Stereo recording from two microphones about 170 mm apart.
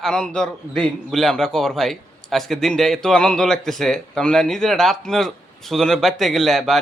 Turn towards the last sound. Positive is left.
turn(degrees=0)  # may be behind; listen again after turning